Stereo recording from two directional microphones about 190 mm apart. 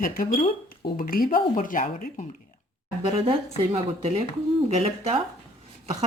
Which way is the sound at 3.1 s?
30° right (ahead or behind).